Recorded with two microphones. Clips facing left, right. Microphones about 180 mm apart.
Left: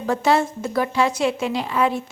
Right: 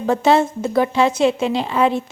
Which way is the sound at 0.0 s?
25° right (ahead or behind).